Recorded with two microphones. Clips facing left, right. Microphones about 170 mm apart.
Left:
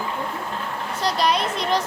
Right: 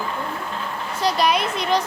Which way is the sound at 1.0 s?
Centre (ahead or behind).